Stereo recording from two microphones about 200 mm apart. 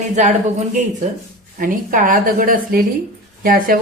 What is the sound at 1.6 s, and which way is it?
A woman's voice, 40° right (ahead or behind).